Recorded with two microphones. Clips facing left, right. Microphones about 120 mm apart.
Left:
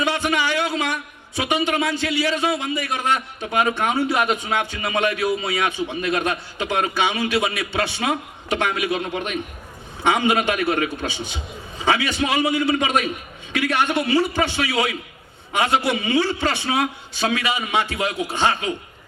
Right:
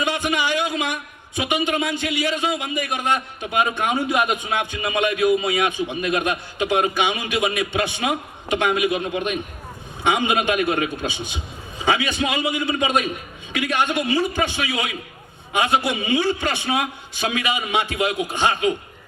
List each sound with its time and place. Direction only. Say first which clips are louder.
0.0 s a man's voice: left 1 dB; 15° right (ahead or behind)